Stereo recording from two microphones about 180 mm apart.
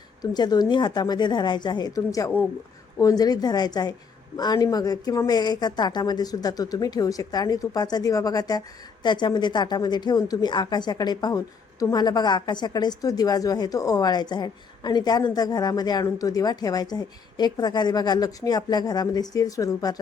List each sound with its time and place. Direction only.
0.2 s a woman's voice: 25° left (ahead or behind)